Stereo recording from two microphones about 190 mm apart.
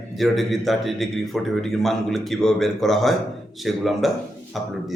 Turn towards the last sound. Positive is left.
turn(degrees=0)  # may be behind; listen again after turning